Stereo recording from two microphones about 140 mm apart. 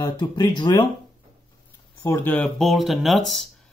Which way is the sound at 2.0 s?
15° left (ahead or behind).